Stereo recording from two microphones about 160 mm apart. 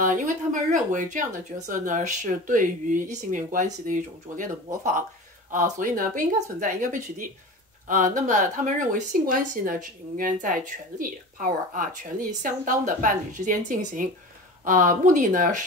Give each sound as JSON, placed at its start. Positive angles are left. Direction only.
{"t": 0.0, "sound": "a woman's voice", "side_deg": -55}
{"t": 5.5, "sound": "a woman's voice", "side_deg": -55}